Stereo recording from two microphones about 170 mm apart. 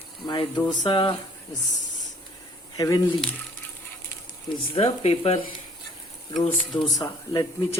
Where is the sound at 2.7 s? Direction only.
20° left (ahead or behind).